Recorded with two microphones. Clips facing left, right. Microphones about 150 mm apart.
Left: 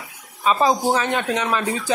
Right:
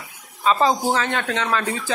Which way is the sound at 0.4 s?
15° left (ahead or behind).